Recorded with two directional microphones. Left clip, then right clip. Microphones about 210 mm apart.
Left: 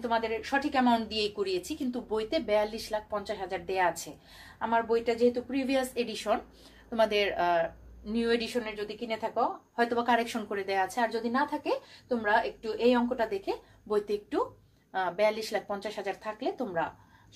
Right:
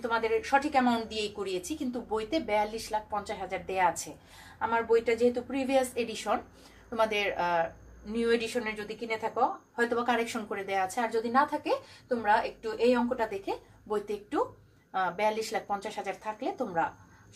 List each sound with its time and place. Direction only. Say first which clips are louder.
0.0 s a woman's voice: right 1 dB; 15° left (ahead or behind)